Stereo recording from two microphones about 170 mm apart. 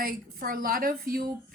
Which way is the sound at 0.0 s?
60° right (ahead or behind).